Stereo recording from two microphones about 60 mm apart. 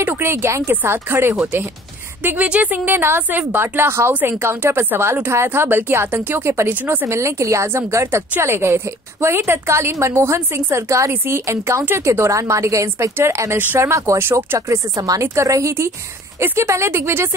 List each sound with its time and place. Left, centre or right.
0.0 s a woman's voice: right
0.7 s a woman's voice: right
7.1 s a woman's voice: right
7.9 s a woman's voice: right
14.1 s speech: right
15.0 s a woman's voice: right
15.4 s a woman's voice: right